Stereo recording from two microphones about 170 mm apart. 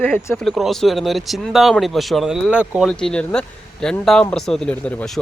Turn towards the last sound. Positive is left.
turn(degrees=5)  # may be behind; listen again after turning